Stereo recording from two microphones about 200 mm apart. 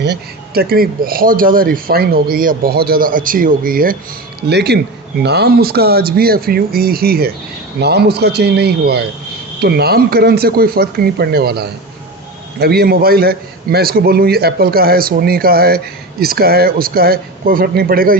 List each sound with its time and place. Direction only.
0.0 s speech: 55° right (ahead or behind)